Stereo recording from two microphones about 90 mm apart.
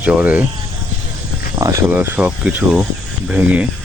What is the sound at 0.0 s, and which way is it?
Speech, 15° right (ahead or behind).